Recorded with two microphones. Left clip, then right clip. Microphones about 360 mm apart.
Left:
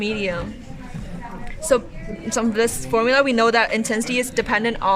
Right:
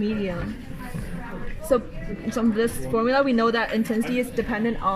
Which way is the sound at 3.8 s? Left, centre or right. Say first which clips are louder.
Left 3 dB; left.